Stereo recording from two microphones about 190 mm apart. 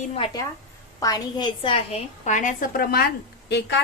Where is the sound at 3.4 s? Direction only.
65° left (ahead or behind).